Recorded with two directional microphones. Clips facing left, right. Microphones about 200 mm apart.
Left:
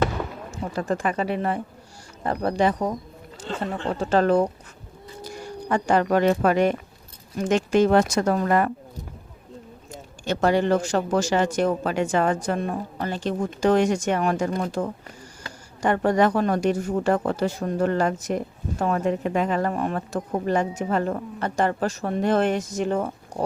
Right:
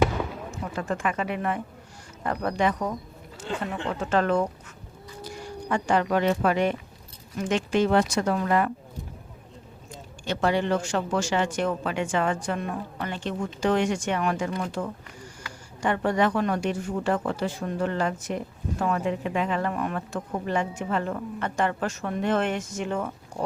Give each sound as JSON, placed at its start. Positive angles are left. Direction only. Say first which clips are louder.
{"t": 0.0, "sound": "a sound", "louder": "right 1 dB", "side_deg": -5}
{"t": 0.6, "sound": "speech", "louder": "left 4 dB", "side_deg": 35}
{"t": 3.9, "sound": "speech", "louder": "left 4 dB", "side_deg": 35}
{"t": 10.2, "sound": "speech", "louder": "left 4 dB", "side_deg": 45}